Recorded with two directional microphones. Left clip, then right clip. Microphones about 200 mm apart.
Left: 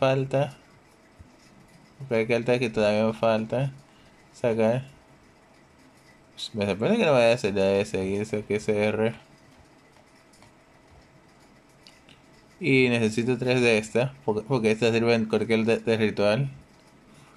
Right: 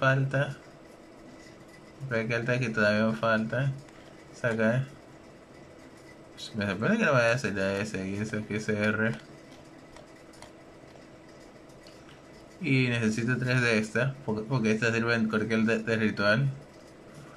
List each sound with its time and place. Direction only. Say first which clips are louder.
0.0 s speech: left 3 dB; 20° left (ahead or behind)
2.0 s speech: left 6 dB; 20° left (ahead or behind)
6.3 s speech: left 5 dB; 20° left (ahead or behind)
12.6 s speech: left 6 dB; 20° left (ahead or behind)